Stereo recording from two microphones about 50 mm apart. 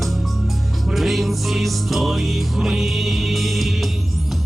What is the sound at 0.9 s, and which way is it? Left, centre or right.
Music, centre.